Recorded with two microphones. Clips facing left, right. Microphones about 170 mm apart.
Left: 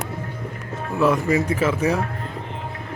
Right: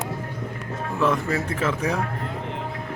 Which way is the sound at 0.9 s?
10° left (ahead or behind).